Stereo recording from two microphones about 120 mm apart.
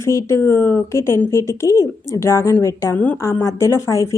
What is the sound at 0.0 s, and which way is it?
Speech, 25° left (ahead or behind).